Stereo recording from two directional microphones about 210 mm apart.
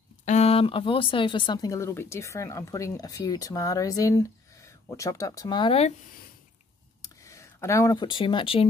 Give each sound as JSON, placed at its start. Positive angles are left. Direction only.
{"t": 0.2, "sound": "speech", "side_deg": 30}
{"t": 7.0, "sound": "speech", "side_deg": 15}